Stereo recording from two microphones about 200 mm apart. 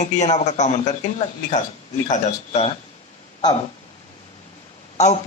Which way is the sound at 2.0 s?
35° left (ahead or behind).